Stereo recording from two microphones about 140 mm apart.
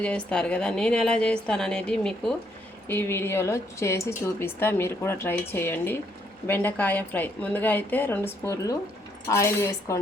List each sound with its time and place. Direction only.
0.0 s a woman's voice: 5° left (ahead or behind)